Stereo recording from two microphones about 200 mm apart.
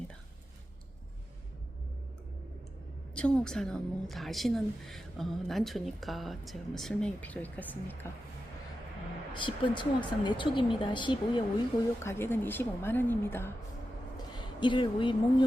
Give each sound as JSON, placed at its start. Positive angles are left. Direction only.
{"t": 3.2, "sound": "a woman's voice", "side_deg": 5}
{"t": 9.3, "sound": "speech", "side_deg": 25}
{"t": 12.0, "sound": "a woman's voice", "side_deg": 10}
{"t": 14.6, "sound": "speech", "side_deg": 25}